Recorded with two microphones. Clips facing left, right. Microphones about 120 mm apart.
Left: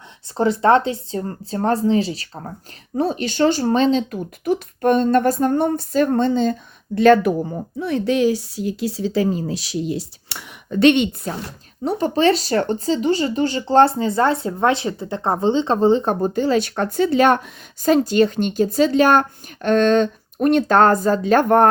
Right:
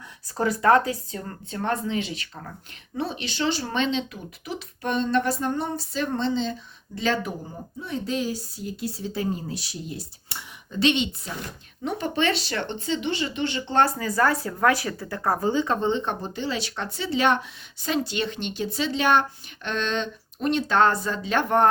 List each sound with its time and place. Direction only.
0.3 s speech: 30° left (ahead or behind); by 11.3 s 55° left (ahead or behind)
11.8 s speech: 35° left (ahead or behind)